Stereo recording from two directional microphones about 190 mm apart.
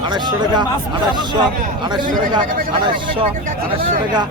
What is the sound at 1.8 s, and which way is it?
Speech, 25° right (ahead or behind).